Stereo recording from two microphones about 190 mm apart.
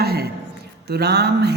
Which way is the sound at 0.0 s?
55° right (ahead or behind).